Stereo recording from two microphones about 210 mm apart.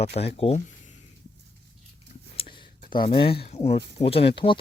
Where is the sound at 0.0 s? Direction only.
30° left (ahead or behind).